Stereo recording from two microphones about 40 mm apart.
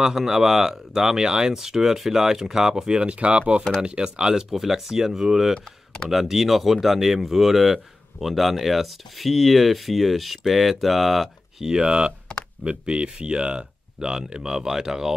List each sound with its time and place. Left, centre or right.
0.0 s speech: centre
11.7 s speech: right